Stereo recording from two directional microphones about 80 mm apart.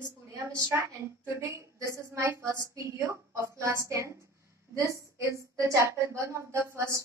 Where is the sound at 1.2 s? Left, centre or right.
Right.